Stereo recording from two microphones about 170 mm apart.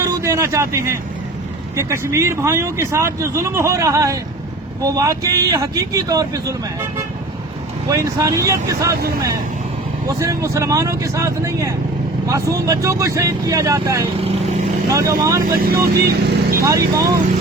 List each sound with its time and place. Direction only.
0.0 s speech: 20° right (ahead or behind)
7.9 s speech: 20° right (ahead or behind)
10.1 s speech: 20° right (ahead or behind)
14.2 s speech: 35° right (ahead or behind)
14.8 s speech: 20° right (ahead or behind)
15.4 s speech: 60° right (ahead or behind)
16.6 s speech: 20° right (ahead or behind)